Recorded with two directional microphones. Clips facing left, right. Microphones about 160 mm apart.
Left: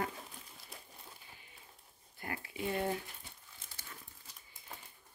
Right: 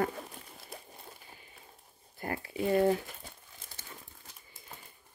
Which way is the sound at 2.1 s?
40° right (ahead or behind).